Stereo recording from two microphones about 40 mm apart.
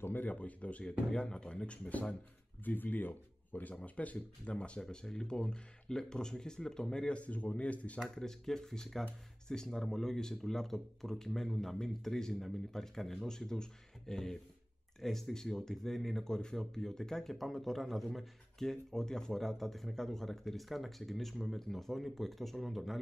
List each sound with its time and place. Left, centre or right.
0.2 s speech: left
1.1 s speech: left
1.9 s speech: left
2.6 s speech: left; by 7.2 s centre
7.2 s speech: left
8.0 s speech: centre